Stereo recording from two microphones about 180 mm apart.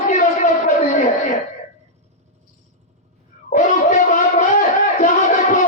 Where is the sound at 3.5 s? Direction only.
40° left (ahead or behind).